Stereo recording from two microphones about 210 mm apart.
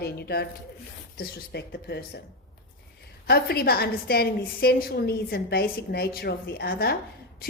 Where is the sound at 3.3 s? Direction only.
50° left (ahead or behind).